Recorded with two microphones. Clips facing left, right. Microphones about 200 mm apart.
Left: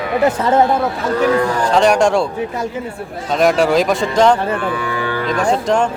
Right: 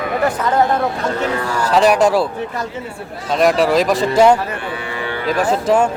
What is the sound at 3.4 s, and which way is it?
Speech, centre (ahead or behind).